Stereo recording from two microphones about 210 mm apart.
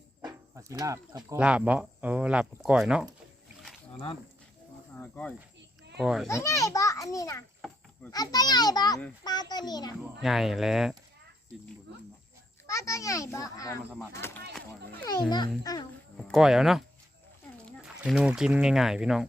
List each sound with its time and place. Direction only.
0.2 s dog: 15° right (ahead or behind)
1.4 s speech: 5° right (ahead or behind)
4.9 s cricket: 5° left (ahead or behind)
6.0 s speech: centre (ahead or behind)
6.2 s a child's voice: 15° left (ahead or behind)
10.2 s speech: centre (ahead or behind)
12.6 s a child's voice: 15° left (ahead or behind)
16.1 s speech: centre (ahead or behind)